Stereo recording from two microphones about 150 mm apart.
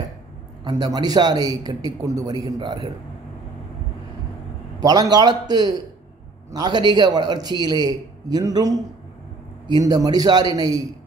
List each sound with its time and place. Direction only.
0.7 s a man's voice: 25° right (ahead or behind)
5.1 s a man's voice: 30° right (ahead or behind)
9.8 s a man's voice: 25° right (ahead or behind)